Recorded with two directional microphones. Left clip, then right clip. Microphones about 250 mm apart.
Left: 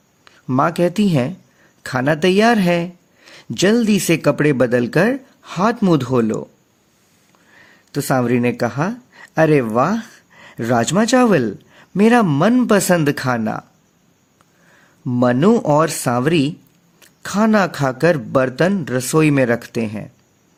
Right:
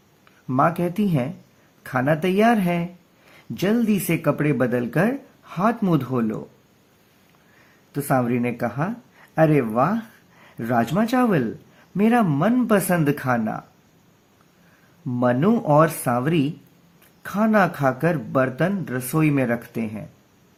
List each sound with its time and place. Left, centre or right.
0.3 s speech: left
7.9 s speech: left
15.0 s speech: left